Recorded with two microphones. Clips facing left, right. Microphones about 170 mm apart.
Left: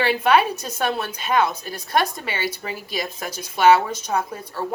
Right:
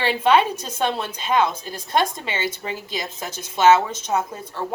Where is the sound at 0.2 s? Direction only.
25° right (ahead or behind).